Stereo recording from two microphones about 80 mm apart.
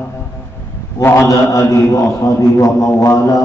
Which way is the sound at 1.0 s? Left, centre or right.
Left.